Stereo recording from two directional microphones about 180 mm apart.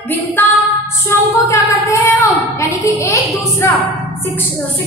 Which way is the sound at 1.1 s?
15° left (ahead or behind).